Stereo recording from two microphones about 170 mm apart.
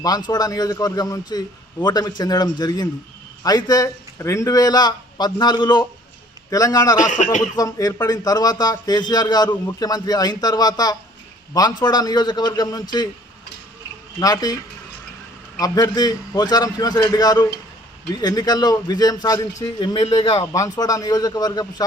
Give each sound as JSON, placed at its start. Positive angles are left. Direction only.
{"t": 0.3, "sound": "a man's voice", "side_deg": 20}
{"t": 14.2, "sound": "a man's voice", "side_deg": 20}
{"t": 15.5, "sound": "a man's voice", "side_deg": 20}